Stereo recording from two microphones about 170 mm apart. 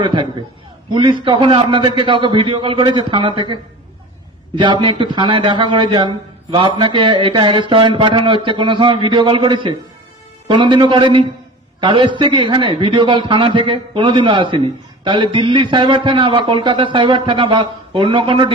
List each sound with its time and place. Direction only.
0.0 s a man's voice: 30° right (ahead or behind)